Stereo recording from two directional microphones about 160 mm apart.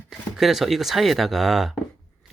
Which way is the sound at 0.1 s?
Centre (ahead or behind).